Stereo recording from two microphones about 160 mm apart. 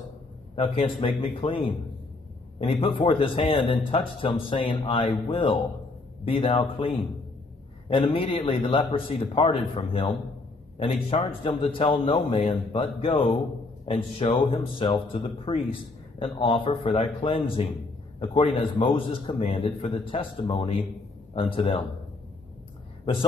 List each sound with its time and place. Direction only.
0.6 s speech: 35° left (ahead or behind)
2.6 s speech: 35° left (ahead or behind)
7.9 s speech: 35° left (ahead or behind)